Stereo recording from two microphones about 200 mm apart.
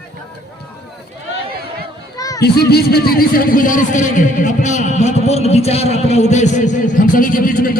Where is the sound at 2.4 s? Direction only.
55° left (ahead or behind).